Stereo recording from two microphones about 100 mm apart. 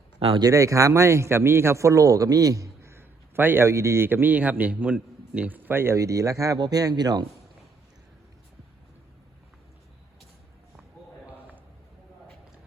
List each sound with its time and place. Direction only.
0.3 s a man's voice: 35° right (ahead or behind)